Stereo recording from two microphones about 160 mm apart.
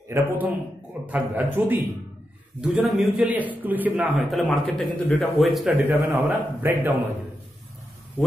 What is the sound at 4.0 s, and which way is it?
Speech, centre (ahead or behind).